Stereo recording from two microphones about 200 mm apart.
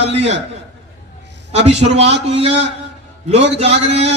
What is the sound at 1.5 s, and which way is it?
Speech, 30° right (ahead or behind).